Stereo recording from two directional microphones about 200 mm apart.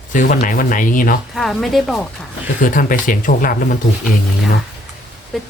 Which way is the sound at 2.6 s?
45° left (ahead or behind).